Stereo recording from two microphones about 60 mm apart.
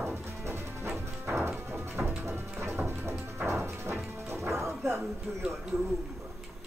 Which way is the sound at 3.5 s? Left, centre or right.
Right.